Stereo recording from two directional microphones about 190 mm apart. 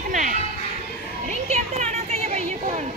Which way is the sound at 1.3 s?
35° right (ahead or behind).